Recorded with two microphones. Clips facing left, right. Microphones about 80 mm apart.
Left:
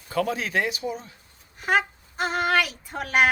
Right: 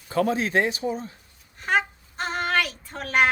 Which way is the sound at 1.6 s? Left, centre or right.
Centre.